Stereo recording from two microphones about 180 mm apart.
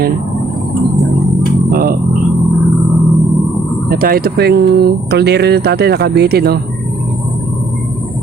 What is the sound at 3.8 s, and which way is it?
Speech, 55° right (ahead or behind).